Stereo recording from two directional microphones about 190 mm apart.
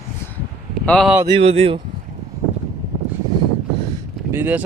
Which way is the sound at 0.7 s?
Centre (ahead or behind).